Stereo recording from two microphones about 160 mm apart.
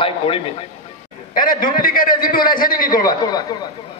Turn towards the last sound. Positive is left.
turn(degrees=60)  # may be behind; listen again after turning